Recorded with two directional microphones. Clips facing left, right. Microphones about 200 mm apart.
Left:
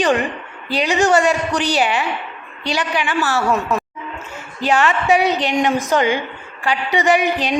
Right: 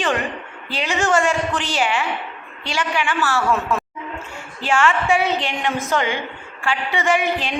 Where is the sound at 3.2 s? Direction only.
40° left (ahead or behind).